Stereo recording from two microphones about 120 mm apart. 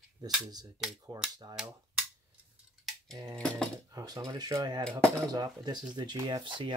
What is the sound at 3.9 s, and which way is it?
Speech, 30° right (ahead or behind).